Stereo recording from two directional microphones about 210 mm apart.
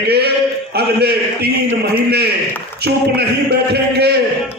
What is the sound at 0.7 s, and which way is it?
A man's voice, 50° right (ahead or behind).